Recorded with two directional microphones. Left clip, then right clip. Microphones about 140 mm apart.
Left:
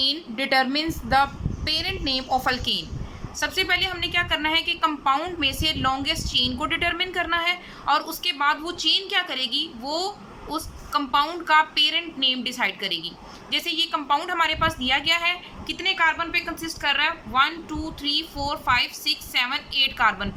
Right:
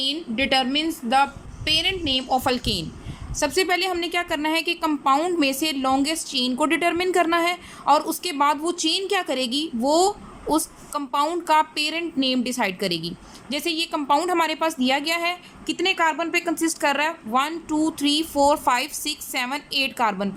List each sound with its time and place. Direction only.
0.0 s a woman's voice: 10° right (ahead or behind); by 20.3 s 40° right (ahead or behind)